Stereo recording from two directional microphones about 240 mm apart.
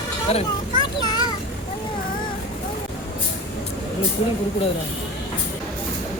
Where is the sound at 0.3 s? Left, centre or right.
Left.